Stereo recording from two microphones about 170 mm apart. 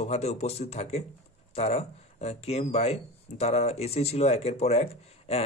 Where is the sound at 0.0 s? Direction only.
40° left (ahead or behind).